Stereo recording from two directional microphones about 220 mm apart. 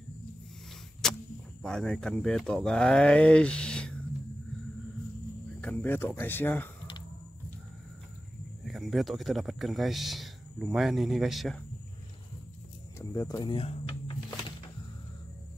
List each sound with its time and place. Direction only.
1.0 s vehicle: centre (ahead or behind)
1.6 s speech: 5° left (ahead or behind)
5.6 s speech: 5° left (ahead or behind)
8.6 s speech: centre (ahead or behind)
13.0 s speech: 15° left (ahead or behind)